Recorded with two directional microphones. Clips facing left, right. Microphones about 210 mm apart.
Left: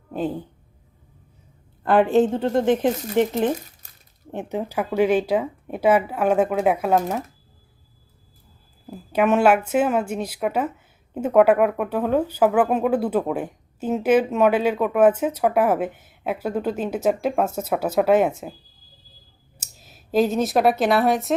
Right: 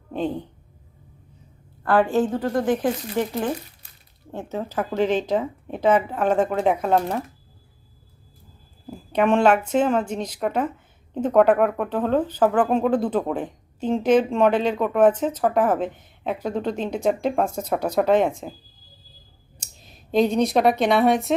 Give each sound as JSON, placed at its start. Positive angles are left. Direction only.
{"t": 0.1, "sound": "a woman's voice", "side_deg": 5}
{"t": 1.8, "sound": "speech", "side_deg": 20}
{"t": 9.1, "sound": "speech", "side_deg": 5}
{"t": 19.5, "sound": "a woman's voice", "side_deg": 5}